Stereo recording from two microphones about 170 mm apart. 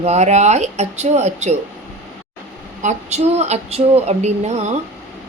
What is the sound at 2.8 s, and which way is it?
A woman's voice, 40° right (ahead or behind).